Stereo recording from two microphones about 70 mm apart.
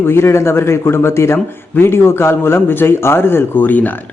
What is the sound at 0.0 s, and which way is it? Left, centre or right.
Speech, left.